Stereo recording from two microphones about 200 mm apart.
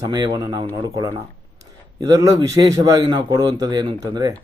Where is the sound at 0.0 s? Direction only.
20° right (ahead or behind).